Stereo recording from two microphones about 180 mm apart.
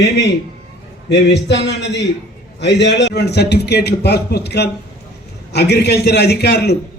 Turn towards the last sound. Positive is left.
turn(degrees=65)  # may be behind; listen again after turning